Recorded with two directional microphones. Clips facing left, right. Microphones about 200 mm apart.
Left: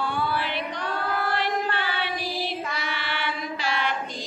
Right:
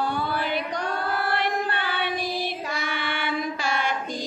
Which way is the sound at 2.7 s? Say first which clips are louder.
Right 2 dB; 50° right (ahead or behind).